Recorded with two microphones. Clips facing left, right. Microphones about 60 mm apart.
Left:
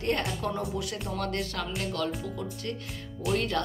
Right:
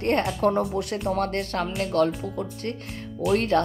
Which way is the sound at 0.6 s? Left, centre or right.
Right.